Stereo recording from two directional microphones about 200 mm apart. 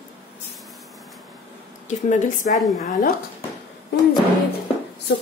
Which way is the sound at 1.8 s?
35° left (ahead or behind).